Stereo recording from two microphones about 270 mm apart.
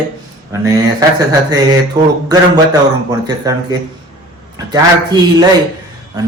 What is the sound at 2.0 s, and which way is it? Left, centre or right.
Speech, centre.